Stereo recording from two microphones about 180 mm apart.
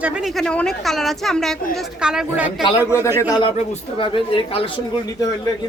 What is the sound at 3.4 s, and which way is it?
Speech, 30° left (ahead or behind).